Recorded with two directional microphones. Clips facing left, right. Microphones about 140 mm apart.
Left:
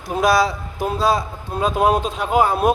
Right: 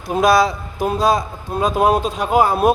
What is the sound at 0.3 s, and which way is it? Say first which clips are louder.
A man's voice: right 2 dB; 20° right (ahead or behind).